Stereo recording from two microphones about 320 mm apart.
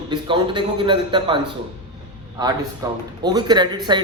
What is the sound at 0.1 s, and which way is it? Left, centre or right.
Speech, centre.